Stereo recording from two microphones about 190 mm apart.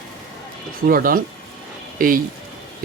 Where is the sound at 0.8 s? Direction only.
50° right (ahead or behind).